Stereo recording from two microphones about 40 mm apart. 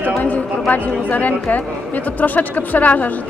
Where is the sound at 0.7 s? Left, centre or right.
Left.